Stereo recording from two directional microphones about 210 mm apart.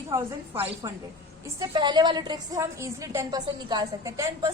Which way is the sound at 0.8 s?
20° right (ahead or behind).